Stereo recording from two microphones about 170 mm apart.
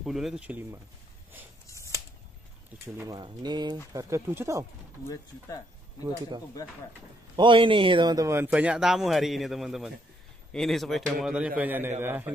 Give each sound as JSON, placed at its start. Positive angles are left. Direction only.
{"t": 0.0, "sound": "a man's voice", "side_deg": 0}
{"t": 1.7, "sound": "a sound", "side_deg": 20}
{"t": 3.1, "sound": "speech", "side_deg": -25}
{"t": 5.0, "sound": "speech", "side_deg": 20}
{"t": 7.3, "sound": "speech", "side_deg": -30}
{"t": 8.5, "sound": "a man's voice", "side_deg": -5}